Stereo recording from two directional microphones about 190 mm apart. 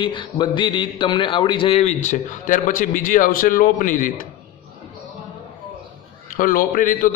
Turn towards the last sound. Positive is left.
turn(degrees=45)  # may be behind; listen again after turning